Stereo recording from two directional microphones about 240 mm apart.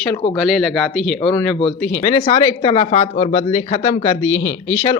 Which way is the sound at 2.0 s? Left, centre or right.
Left.